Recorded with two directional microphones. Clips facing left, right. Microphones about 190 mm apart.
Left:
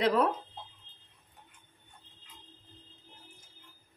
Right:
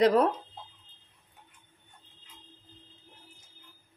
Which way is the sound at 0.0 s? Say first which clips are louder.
Right 4 dB; 40° right (ahead or behind).